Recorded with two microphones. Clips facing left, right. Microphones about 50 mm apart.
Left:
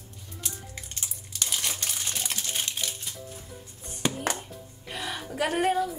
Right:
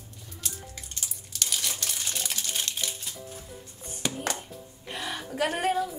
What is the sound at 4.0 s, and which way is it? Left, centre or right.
Music, centre.